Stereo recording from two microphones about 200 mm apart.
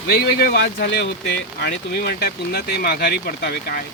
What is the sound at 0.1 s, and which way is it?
Speech, 50° left (ahead or behind).